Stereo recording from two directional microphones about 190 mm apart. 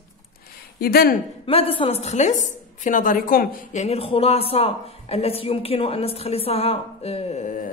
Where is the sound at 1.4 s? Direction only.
30° left (ahead or behind).